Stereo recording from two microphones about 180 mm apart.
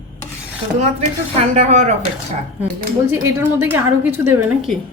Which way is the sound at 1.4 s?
40° right (ahead or behind).